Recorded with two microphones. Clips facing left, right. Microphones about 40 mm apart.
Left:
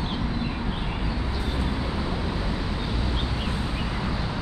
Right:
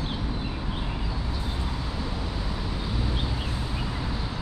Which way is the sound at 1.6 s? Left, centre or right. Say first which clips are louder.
Left 4 dB; left.